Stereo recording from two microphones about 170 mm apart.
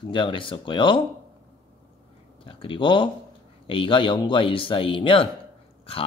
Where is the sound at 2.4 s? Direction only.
30° left (ahead or behind).